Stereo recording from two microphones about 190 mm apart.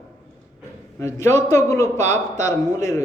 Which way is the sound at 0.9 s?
15° left (ahead or behind).